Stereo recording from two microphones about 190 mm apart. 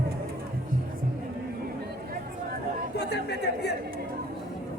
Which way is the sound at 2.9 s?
60° left (ahead or behind).